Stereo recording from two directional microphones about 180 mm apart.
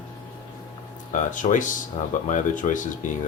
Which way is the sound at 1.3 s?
45° left (ahead or behind).